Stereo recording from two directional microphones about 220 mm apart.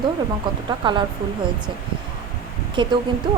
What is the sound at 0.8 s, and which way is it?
Speech, 20° right (ahead or behind).